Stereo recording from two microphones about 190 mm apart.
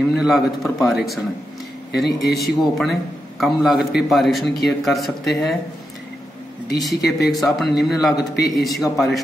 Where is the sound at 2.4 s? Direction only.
Centre (ahead or behind).